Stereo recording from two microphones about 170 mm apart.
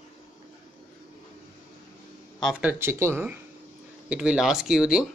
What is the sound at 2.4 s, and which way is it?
Speech, 5° right (ahead or behind).